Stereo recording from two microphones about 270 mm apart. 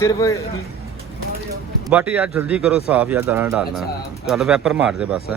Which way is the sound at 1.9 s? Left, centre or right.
Centre.